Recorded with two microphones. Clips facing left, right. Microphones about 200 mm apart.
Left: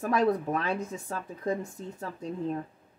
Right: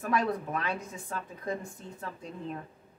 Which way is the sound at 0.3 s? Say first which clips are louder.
Left 5 dB; 40° left (ahead or behind).